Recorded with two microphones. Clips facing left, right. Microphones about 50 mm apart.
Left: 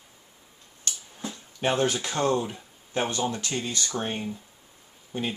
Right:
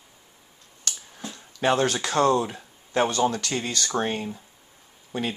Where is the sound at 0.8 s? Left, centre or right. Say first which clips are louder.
Right 1 dB; right.